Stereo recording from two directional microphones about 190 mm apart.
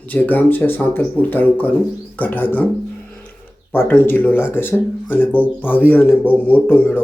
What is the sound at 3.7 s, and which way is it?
Speech, 10° left (ahead or behind).